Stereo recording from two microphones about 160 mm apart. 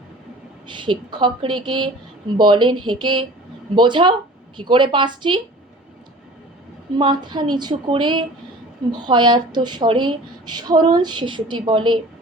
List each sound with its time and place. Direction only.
0.7 s a woman's voice: 30° right (ahead or behind)
6.9 s speech: 30° right (ahead or behind)